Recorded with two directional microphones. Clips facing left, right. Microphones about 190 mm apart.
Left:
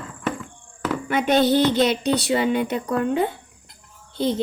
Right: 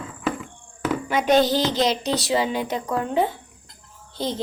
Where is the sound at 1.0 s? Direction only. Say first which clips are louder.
Even; 55° left (ahead or behind).